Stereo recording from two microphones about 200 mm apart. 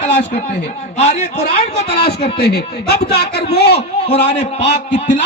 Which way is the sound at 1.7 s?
55° left (ahead or behind).